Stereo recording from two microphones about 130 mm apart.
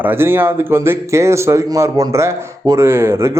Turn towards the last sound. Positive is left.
turn(degrees=-20)  # may be behind; listen again after turning